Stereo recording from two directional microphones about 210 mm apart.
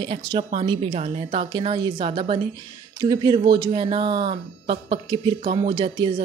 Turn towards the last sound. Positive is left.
turn(degrees=-25)  # may be behind; listen again after turning